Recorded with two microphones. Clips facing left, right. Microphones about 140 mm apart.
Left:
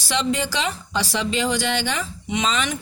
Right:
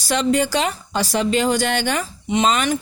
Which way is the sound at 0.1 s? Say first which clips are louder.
Right 5 dB; 45° right (ahead or behind).